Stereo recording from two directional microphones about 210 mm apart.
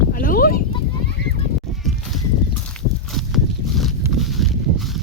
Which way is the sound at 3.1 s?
Centre (ahead or behind).